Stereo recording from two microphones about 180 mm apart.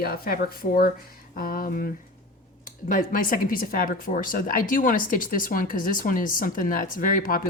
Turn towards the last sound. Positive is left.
turn(degrees=50)  # may be behind; listen again after turning